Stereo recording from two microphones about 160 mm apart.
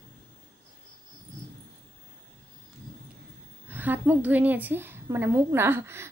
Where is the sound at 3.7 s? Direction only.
10° right (ahead or behind).